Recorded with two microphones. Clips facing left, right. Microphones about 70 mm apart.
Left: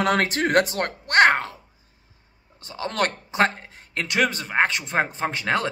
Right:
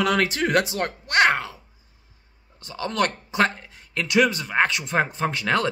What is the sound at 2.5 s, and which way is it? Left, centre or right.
Speech, left.